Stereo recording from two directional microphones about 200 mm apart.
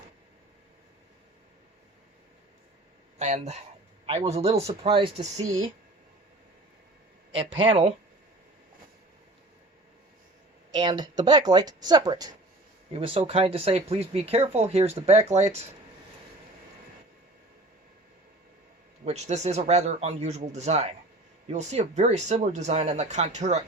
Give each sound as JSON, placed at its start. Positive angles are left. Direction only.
{"t": 3.2, "sound": "speech", "side_deg": -35}
{"t": 7.3, "sound": "speech", "side_deg": -25}
{"t": 10.7, "sound": "speech", "side_deg": -20}
{"t": 19.0, "sound": "speech", "side_deg": -35}